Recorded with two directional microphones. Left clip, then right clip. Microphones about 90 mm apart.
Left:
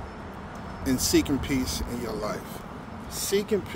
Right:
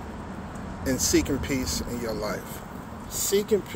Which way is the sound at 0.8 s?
35° left (ahead or behind).